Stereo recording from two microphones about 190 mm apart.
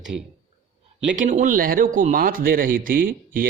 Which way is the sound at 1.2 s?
40° right (ahead or behind).